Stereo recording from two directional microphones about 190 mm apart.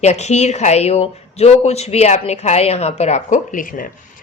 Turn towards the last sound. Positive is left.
turn(degrees=45)  # may be behind; listen again after turning